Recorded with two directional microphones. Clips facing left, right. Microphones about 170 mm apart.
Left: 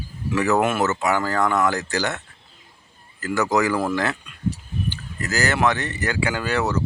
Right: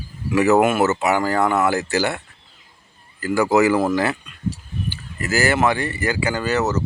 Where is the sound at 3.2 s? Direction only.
5° right (ahead or behind).